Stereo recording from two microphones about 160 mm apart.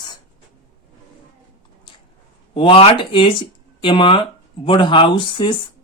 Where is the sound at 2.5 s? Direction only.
35° left (ahead or behind).